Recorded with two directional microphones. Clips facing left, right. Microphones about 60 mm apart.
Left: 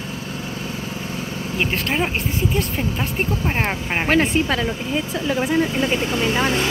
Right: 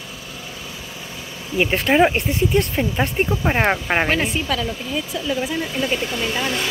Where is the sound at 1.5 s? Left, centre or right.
Centre.